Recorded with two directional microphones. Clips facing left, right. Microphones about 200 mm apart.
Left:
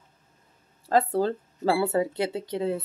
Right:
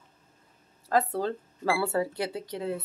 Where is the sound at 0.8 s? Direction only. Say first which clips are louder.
Left 4 dB; 30° left (ahead or behind).